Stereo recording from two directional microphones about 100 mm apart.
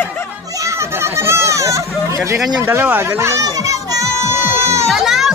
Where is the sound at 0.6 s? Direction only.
25° right (ahead or behind).